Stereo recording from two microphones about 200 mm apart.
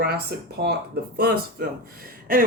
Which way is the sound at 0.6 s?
55° right (ahead or behind).